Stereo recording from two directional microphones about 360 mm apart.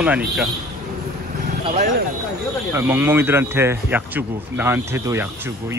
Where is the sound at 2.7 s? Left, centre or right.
Centre.